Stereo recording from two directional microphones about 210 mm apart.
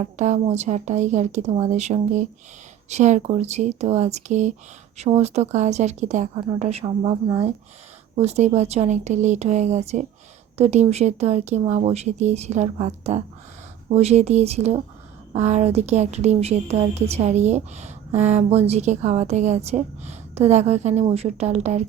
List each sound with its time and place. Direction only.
0.0 s a woman's voice: 35° right (ahead or behind)